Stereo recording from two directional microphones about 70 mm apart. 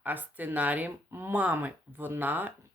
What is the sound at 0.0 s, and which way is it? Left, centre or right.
Speech, right.